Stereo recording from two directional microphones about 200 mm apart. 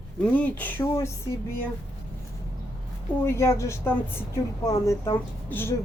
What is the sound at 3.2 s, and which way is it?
A woman's voice, 15° left (ahead or behind).